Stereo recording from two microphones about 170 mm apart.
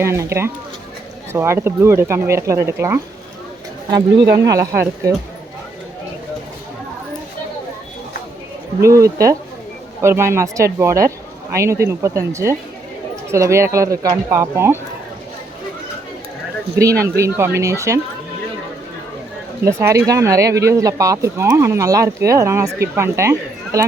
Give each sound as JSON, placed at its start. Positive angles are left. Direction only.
{"t": 0.0, "sound": "speech", "side_deg": -15}
{"t": 4.4, "sound": "speech", "side_deg": -20}
{"t": 8.8, "sound": "speech", "side_deg": -20}
{"t": 17.0, "sound": "speech", "side_deg": -15}
{"t": 19.6, "sound": "speech", "side_deg": -15}